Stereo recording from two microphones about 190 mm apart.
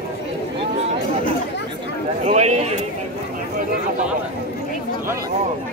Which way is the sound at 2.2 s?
35° right (ahead or behind).